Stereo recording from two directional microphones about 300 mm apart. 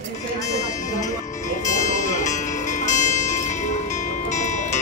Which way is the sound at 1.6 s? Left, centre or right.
Left.